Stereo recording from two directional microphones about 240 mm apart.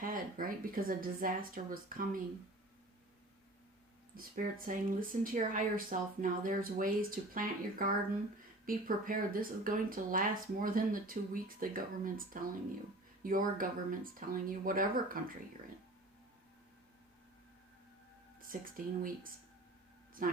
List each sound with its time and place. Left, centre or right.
0.0 s speech: right
4.1 s speech: right
18.3 s speech: right